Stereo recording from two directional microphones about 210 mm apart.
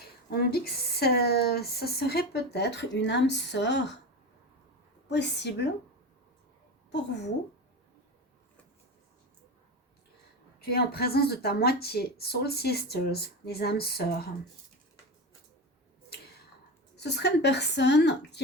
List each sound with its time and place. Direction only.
0.3 s speech: 50° left (ahead or behind)
5.0 s a woman's voice: 55° left (ahead or behind)
10.6 s speech: 50° left (ahead or behind)
17.0 s speech: 55° left (ahead or behind)